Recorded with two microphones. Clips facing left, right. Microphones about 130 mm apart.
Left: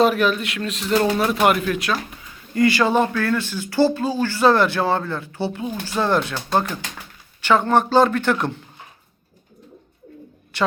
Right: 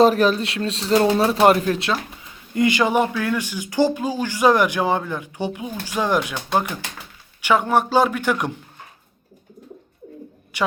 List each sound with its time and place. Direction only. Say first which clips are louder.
0.0 s speech: right 2 dB; 35° right (ahead or behind); by 8.5 s 10° right (ahead or behind)
10.5 s a woman's voice: left 2 dB; 10° right (ahead or behind)